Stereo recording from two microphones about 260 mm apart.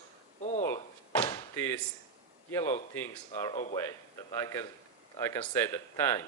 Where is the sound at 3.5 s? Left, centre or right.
Left.